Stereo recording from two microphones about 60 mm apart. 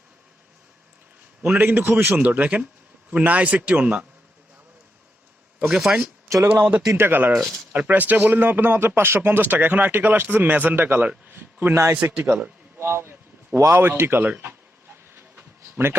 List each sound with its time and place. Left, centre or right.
1.5 s a man's voice: right
5.6 s a man's voice: centre
6.9 s speech: right
7.3 s speech: centre
7.7 s speech: right
11.3 s a sound: right
12.1 s a man's voice: right
12.8 s a sound: right
13.7 s speech: right
14.8 s a sound: right